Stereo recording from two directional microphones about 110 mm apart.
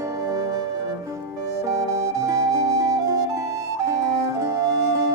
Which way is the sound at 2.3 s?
35° right (ahead or behind).